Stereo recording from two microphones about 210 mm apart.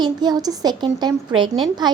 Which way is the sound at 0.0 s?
20° right (ahead or behind).